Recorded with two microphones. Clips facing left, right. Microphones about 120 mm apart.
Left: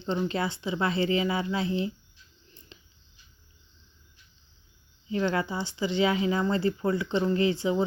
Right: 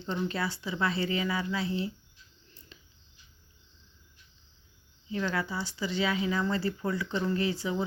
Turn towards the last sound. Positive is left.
turn(degrees=25)  # may be behind; listen again after turning